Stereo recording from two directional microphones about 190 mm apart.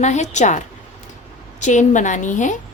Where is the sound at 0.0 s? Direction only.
40° left (ahead or behind).